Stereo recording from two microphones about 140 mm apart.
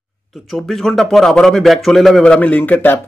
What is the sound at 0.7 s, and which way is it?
A man's voice, centre (ahead or behind).